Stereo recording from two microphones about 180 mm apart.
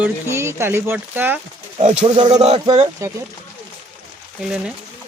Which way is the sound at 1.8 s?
40° right (ahead or behind).